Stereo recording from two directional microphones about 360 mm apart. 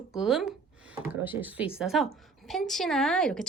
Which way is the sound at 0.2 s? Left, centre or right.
Centre.